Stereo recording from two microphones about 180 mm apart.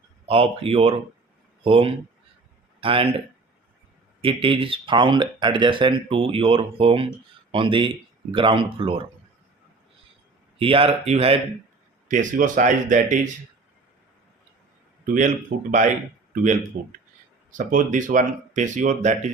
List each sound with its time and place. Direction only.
0.3 s speech: 30° right (ahead or behind)
4.2 s speech: 30° right (ahead or behind)
10.6 s speech: 30° right (ahead or behind)
15.0 s speech: 50° right (ahead or behind)